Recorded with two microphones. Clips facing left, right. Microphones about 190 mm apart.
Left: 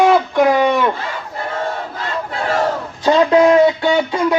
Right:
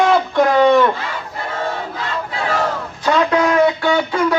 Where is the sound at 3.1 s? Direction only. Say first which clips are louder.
Left 5 dB; 25° left (ahead or behind).